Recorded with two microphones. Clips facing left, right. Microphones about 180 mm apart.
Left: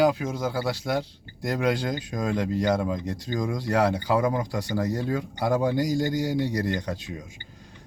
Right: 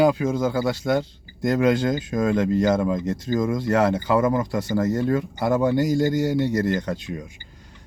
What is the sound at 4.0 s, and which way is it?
Speech, 5° right (ahead or behind).